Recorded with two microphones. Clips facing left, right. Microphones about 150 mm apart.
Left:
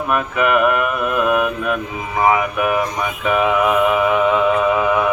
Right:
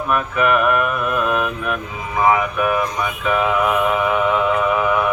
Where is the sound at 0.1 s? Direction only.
15° left (ahead or behind).